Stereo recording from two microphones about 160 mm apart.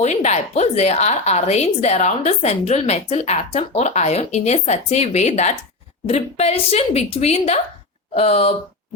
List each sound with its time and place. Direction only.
0.0 s a woman's voice: 45° left (ahead or behind)